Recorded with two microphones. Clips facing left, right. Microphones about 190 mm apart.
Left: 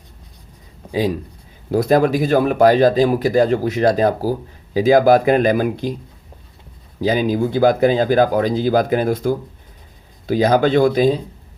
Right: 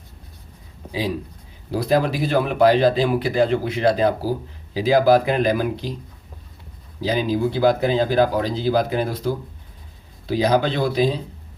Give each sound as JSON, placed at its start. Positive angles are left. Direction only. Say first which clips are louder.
{"t": 1.7, "sound": "speech", "louder": "left 5 dB", "side_deg": 50}
{"t": 7.0, "sound": "speech", "louder": "left 3 dB", "side_deg": 50}